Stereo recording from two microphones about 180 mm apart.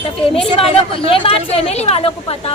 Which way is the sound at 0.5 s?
30° left (ahead or behind).